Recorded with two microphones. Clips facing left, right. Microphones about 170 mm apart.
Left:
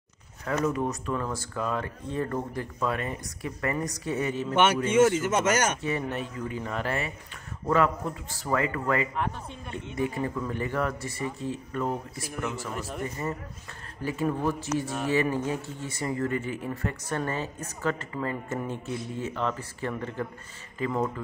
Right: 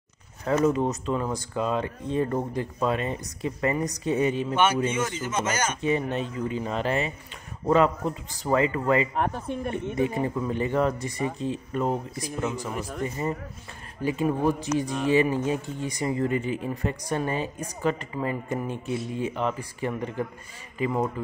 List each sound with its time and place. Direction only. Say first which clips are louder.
0.5 s speech: right 5 dB; 25° right (ahead or behind)
4.9 s speech: left 7 dB; 75° left (ahead or behind)
5.8 s speech: right 4 dB; 20° right (ahead or behind)
9.1 s speech: right 5 dB; 55° right (ahead or behind)
9.9 s speech: right 2 dB; 20° right (ahead or behind)